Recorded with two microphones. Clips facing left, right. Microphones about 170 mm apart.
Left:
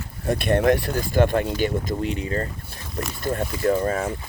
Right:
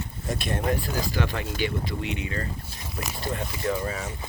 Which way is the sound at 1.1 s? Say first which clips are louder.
Left 9 dB; 50° left (ahead or behind).